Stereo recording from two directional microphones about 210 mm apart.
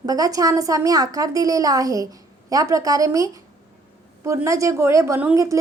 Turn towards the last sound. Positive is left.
turn(degrees=-15)  # may be behind; listen again after turning